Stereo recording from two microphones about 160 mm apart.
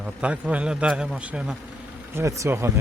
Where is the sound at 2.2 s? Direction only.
20° right (ahead or behind).